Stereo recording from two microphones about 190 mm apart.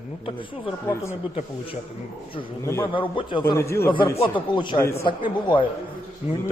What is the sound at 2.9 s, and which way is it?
Speech, 25° left (ahead or behind).